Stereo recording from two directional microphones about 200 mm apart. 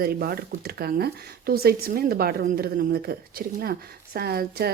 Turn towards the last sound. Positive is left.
turn(degrees=-50)  # may be behind; listen again after turning